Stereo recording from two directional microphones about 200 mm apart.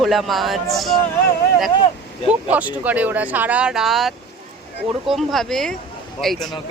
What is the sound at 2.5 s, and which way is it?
Speech, 10° right (ahead or behind).